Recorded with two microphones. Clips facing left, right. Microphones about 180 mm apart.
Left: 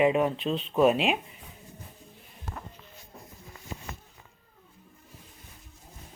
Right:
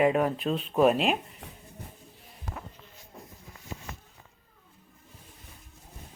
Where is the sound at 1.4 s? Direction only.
80° right.